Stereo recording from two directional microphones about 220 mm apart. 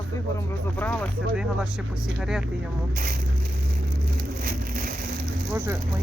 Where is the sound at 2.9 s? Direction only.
40° right (ahead or behind).